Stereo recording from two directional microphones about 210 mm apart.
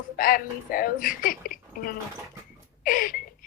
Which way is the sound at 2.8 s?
40° left (ahead or behind).